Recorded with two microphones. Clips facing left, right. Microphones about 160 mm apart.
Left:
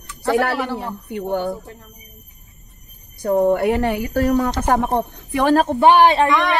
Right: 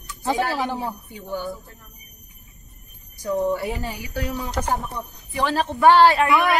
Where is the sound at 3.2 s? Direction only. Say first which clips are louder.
Left 7 dB; 60° left (ahead or behind).